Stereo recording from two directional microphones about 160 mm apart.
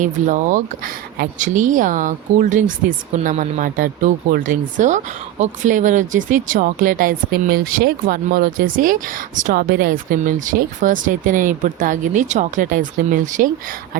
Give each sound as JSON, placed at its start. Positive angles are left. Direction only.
{"t": 0.0, "sound": "speech", "side_deg": -50}